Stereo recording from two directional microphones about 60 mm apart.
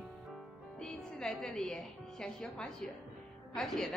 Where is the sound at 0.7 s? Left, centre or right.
Centre.